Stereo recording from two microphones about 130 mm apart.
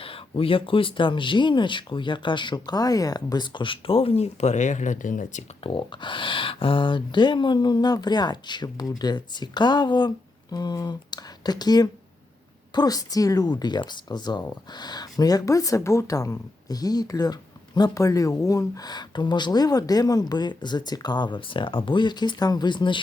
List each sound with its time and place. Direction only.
0.0 s a woman's voice: 45° left (ahead or behind); by 5.5 s 70° left (ahead or behind)
5.5 s a woman's voice: 40° left (ahead or behind)